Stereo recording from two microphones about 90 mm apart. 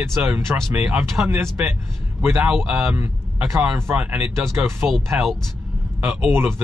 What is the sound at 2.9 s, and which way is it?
A man's voice, 30° right (ahead or behind).